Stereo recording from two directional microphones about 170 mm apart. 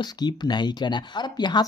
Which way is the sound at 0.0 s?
25° left (ahead or behind).